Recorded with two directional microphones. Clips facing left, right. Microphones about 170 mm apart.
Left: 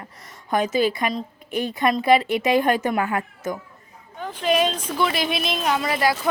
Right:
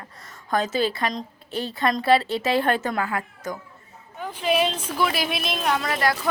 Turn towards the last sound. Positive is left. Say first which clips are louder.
# left 2 dB
turn(degrees=5)  # may be behind; listen again after turning